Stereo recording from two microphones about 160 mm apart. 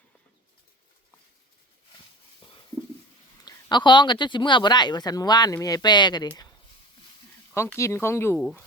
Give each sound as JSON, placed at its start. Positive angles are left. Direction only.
{"t": 3.4, "sound": "speech", "side_deg": 30}
{"t": 7.5, "sound": "speech", "side_deg": 15}
{"t": 8.4, "sound": "speech", "side_deg": 0}